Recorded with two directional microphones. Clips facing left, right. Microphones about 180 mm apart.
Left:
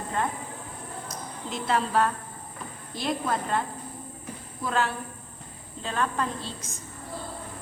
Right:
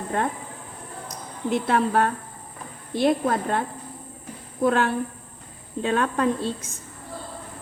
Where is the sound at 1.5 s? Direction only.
55° right (ahead or behind).